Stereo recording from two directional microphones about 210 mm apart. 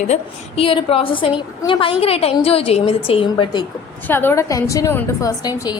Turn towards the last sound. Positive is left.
turn(degrees=15)  # may be behind; listen again after turning